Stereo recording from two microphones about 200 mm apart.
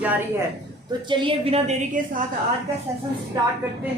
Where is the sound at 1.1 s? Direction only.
25° right (ahead or behind).